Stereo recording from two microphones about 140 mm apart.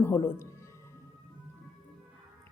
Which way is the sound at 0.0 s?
20° left (ahead or behind).